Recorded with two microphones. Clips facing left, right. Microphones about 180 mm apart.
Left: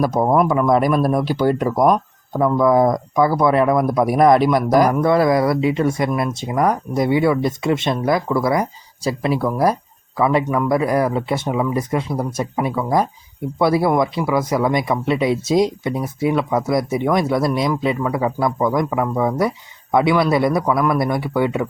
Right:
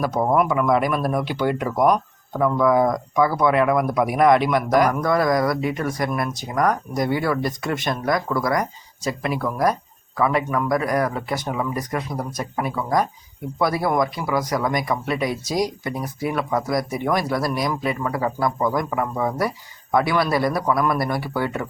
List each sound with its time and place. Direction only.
0.0 s speech: 35° left (ahead or behind)
20.6 s speech: centre (ahead or behind)
21.0 s speech: 20° left (ahead or behind)